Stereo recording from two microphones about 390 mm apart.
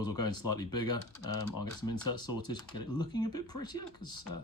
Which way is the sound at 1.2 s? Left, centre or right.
Left.